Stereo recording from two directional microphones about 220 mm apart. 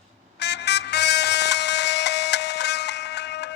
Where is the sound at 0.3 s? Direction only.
50° left (ahead or behind).